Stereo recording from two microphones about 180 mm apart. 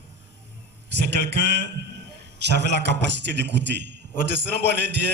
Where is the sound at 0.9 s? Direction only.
70° right (ahead or behind).